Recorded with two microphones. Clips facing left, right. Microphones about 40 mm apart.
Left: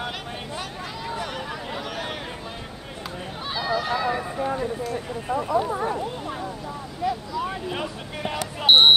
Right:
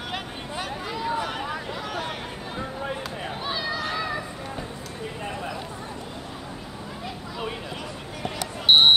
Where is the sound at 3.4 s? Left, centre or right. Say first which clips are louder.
Left 4 dB; centre.